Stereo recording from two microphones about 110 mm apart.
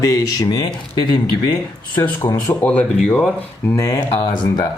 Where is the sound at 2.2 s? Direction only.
30° left (ahead or behind).